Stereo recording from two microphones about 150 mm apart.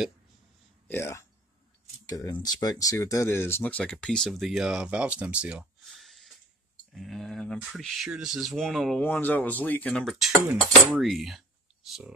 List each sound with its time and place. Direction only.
0.8 s speech: 15° left (ahead or behind)
10.5 s speech: 5° right (ahead or behind)